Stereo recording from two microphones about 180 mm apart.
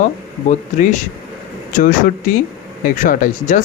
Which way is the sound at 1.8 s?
50° left (ahead or behind).